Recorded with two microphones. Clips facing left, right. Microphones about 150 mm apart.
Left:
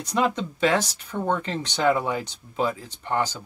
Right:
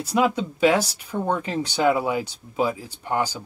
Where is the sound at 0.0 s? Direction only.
10° right (ahead or behind).